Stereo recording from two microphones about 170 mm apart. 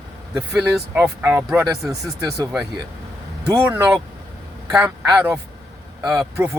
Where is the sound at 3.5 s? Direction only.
15° right (ahead or behind).